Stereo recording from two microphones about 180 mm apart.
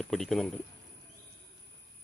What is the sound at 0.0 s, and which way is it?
Speech, centre (ahead or behind).